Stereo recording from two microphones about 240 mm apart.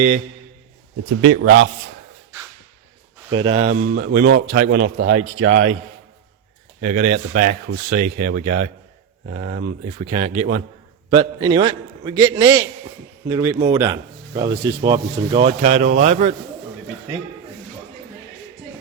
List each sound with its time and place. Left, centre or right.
1.2 s a man's voice: right
3.3 s speech: right
3.7 s speech: right
6.8 s a man's voice: right